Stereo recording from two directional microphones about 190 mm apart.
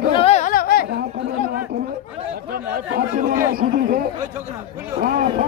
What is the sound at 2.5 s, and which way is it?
A man's voice, 50° right (ahead or behind).